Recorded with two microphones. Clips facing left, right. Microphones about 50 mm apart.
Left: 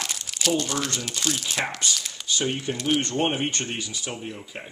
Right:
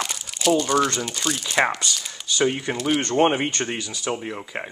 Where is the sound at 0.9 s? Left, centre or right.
Centre.